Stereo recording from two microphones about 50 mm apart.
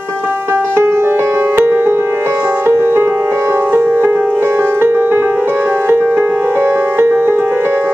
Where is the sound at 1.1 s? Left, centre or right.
Right.